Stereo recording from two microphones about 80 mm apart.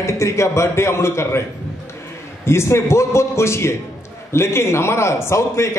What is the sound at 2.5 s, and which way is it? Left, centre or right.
A man's voice, left.